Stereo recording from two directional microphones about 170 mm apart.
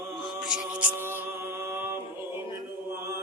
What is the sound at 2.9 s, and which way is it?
Chant, 15° right (ahead or behind).